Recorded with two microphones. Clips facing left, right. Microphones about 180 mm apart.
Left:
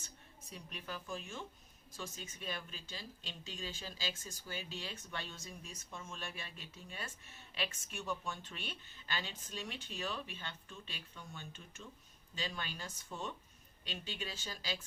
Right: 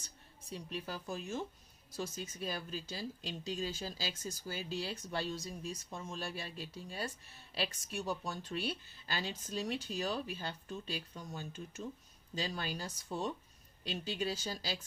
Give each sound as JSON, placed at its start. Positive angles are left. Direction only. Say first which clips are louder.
{"t": 0.5, "sound": "speech", "louder": "right 5 dB", "side_deg": -35}